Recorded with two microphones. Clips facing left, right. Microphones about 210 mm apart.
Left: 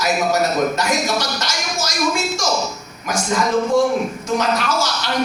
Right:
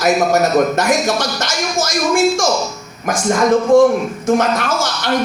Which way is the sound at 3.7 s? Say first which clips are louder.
Right 7 dB; 50° right (ahead or behind).